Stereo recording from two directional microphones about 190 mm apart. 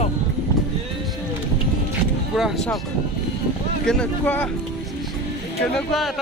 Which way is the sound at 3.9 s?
5° left (ahead or behind).